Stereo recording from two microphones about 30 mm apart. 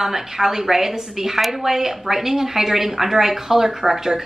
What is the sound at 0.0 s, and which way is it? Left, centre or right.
Speech, centre.